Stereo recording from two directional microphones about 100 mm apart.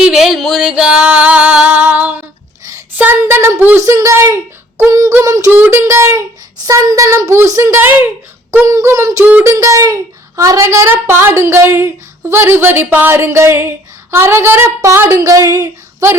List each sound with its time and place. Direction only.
0.0 s music: 5° right (ahead or behind)
2.9 s speech: 20° right (ahead or behind)
3.8 s child singing: 30° right (ahead or behind)
5.5 s speech: 20° right (ahead or behind)
6.7 s child singing: 35° right (ahead or behind)
9.2 s speech: 15° right (ahead or behind)
9.5 s speech: 30° right (ahead or behind)